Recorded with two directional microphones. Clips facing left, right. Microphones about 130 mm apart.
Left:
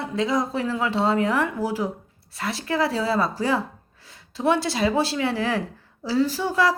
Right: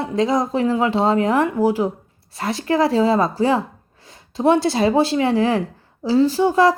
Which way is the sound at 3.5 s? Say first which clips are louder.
Right 5 dB; 20° right (ahead or behind).